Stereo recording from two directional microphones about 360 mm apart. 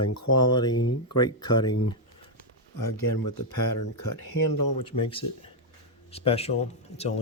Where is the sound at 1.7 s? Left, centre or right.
Left.